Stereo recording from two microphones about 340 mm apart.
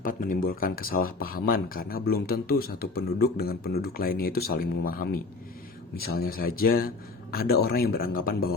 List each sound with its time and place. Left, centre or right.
0.0 s speech: left